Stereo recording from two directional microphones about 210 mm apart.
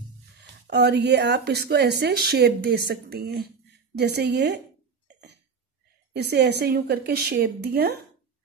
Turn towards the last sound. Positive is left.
turn(degrees=-50)  # may be behind; listen again after turning